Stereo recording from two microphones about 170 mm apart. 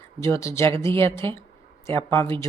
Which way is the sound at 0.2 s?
15° left (ahead or behind).